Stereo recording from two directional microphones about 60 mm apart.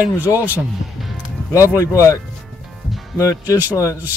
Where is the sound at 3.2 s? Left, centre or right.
Left.